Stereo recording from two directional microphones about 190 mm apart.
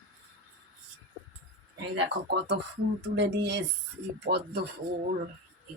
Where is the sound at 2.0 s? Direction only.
65° right (ahead or behind).